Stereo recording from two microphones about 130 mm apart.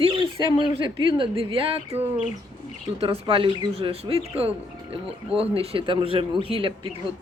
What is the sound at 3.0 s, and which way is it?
Speech, 40° right (ahead or behind).